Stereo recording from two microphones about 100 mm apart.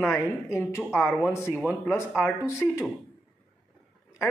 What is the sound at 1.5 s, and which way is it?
Speech, 5° left (ahead or behind).